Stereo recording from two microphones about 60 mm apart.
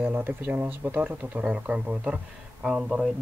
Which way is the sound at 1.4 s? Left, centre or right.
Right.